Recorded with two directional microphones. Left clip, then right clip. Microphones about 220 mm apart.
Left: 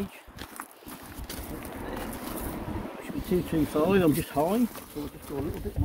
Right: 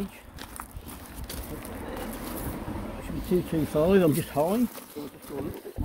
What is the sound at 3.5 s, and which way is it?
Speech, 5° right (ahead or behind).